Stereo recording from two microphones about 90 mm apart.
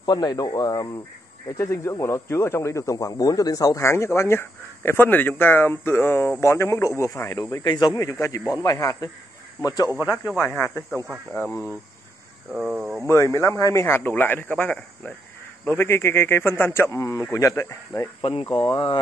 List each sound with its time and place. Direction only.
0.0 s speech: 50° left (ahead or behind)
1.6 s speech: 30° left (ahead or behind)
7.6 s speech: 50° left (ahead or behind)
10.4 s a man's voice: 25° left (ahead or behind)
12.5 s speech: 5° right (ahead or behind)
13.1 s a man's voice: 35° left (ahead or behind)
17.0 s speech: 40° left (ahead or behind)
18.2 s speech: 85° left